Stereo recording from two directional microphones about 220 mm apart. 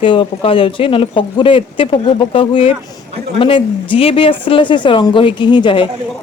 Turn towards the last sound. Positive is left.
turn(degrees=20)  # may be behind; listen again after turning